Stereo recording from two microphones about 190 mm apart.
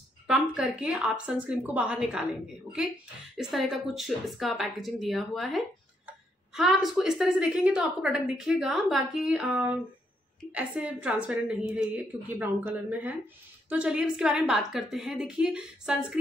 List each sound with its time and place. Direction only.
0.3 s a woman's voice: 5° right (ahead or behind)
3.3 s a woman's voice: centre (ahead or behind)